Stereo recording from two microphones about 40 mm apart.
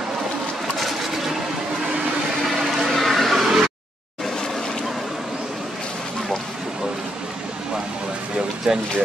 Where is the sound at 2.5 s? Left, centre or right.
Centre.